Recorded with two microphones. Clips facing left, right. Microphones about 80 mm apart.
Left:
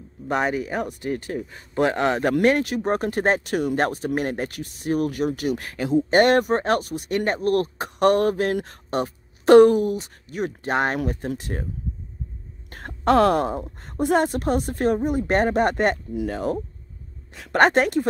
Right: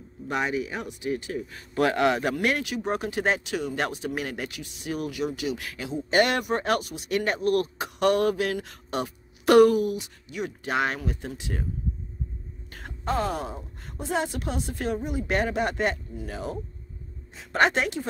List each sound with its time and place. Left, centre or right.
0.3 s speech: left
1.5 s speech: left
13.0 s speech: left
17.3 s a sound: left
17.6 s speech: left